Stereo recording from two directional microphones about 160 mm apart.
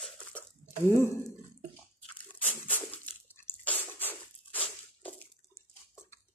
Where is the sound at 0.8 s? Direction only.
15° left (ahead or behind).